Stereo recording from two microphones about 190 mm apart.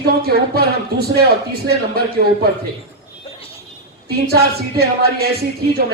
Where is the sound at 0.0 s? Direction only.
55° right (ahead or behind).